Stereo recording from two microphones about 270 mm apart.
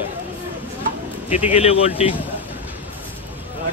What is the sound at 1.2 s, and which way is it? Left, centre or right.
Speech, left.